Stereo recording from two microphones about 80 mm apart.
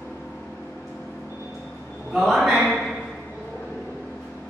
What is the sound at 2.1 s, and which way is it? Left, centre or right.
Speech, centre.